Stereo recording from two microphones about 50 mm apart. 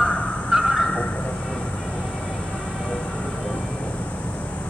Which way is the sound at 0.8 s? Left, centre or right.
Left.